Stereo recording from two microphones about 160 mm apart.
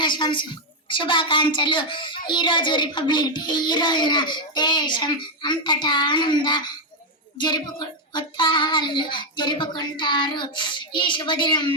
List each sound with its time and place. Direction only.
0.0 s a woman's voice: 30° left (ahead or behind)